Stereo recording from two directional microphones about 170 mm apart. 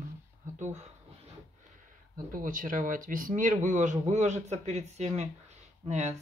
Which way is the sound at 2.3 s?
50° right (ahead or behind).